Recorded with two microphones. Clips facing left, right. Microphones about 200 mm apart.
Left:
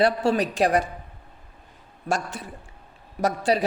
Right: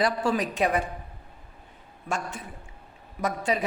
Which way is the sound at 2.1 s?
90° left.